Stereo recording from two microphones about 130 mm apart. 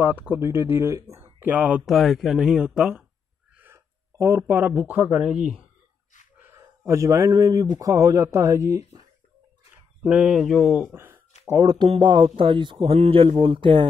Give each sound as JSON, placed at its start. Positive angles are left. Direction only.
{"t": 0.0, "sound": "speech", "side_deg": -10}
{"t": 1.9, "sound": "speech", "side_deg": 0}
{"t": 3.5, "sound": "a sound", "side_deg": -20}
{"t": 5.2, "sound": "speech", "side_deg": -5}
{"t": 6.3, "sound": "a sound", "side_deg": -15}
{"t": 6.8, "sound": "speech", "side_deg": -20}
{"t": 10.0, "sound": "speech", "side_deg": -10}
{"t": 11.4, "sound": "speech", "side_deg": -25}